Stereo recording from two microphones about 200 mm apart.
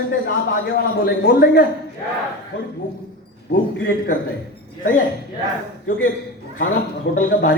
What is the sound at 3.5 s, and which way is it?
Speech, 50° left (ahead or behind).